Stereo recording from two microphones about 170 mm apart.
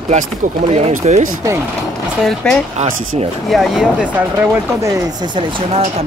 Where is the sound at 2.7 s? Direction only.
35° right (ahead or behind).